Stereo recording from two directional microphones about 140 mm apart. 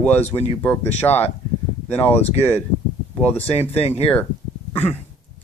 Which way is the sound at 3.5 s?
45° left (ahead or behind).